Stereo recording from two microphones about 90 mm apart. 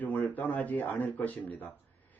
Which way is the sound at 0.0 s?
20° left (ahead or behind).